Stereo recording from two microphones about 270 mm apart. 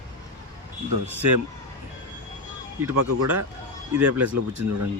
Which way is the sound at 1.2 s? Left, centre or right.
Right.